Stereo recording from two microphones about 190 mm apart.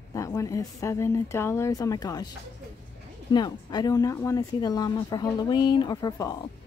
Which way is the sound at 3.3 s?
20° left (ahead or behind).